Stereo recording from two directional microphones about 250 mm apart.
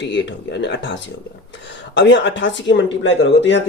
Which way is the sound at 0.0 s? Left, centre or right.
Left.